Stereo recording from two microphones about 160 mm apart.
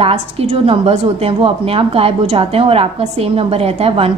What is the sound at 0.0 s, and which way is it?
A woman's voice, 40° right (ahead or behind).